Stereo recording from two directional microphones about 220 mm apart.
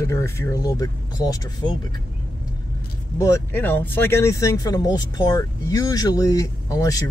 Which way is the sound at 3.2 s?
10° left (ahead or behind).